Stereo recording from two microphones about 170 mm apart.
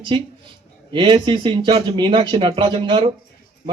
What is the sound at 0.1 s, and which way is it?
Speech, 30° right (ahead or behind).